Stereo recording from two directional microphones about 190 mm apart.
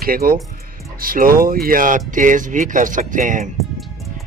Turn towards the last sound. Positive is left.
turn(degrees=-40)  # may be behind; listen again after turning